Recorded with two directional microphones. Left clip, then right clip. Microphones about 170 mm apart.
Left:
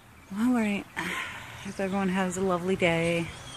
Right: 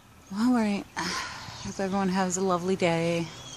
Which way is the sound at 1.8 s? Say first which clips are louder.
Right 1 dB; 10° right (ahead or behind).